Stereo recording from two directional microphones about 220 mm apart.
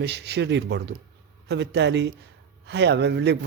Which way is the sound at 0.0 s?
50° right (ahead or behind).